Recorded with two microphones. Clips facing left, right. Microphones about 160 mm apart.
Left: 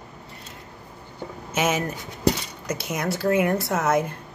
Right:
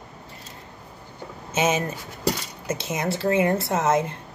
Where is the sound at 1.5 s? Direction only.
25° right (ahead or behind).